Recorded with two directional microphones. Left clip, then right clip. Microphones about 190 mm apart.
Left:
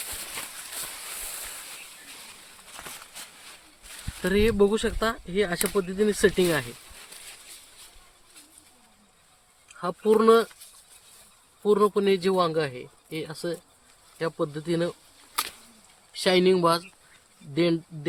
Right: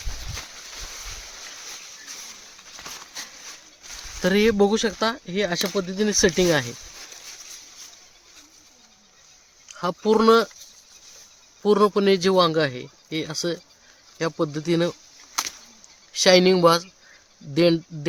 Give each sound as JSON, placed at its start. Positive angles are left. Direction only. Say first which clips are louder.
{"t": 4.2, "sound": "speech", "louder": "right 3 dB", "side_deg": -60}
{"t": 9.7, "sound": "speech", "louder": "right 2 dB", "side_deg": -60}
{"t": 11.6, "sound": "speech", "louder": "right 3 dB", "side_deg": -70}
{"t": 16.1, "sound": "speech", "louder": "right 5 dB", "side_deg": -70}
{"t": 17.5, "sound": "speech", "louder": "right 5 dB", "side_deg": -85}